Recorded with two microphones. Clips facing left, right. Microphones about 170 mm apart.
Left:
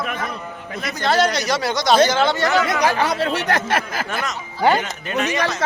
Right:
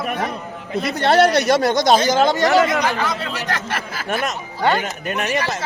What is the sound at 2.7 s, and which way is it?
Speech, 65° left (ahead or behind).